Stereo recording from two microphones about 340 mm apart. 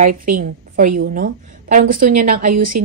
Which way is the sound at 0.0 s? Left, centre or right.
Right.